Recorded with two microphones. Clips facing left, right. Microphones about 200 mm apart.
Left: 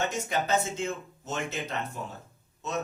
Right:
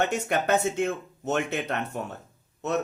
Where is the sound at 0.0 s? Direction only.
65° right (ahead or behind).